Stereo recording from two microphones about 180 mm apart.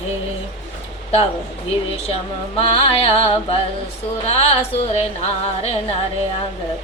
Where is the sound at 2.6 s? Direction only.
30° left (ahead or behind).